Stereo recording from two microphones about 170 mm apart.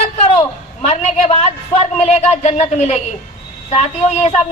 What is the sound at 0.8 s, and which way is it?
A man's voice, 40° left (ahead or behind).